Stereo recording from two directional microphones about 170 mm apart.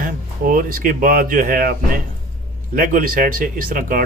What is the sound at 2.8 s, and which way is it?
Speech, 55° right (ahead or behind).